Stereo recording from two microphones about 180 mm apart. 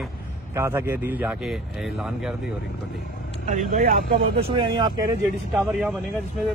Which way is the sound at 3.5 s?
45° right (ahead or behind).